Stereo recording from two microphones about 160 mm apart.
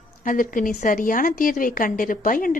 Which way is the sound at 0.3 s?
55° left (ahead or behind).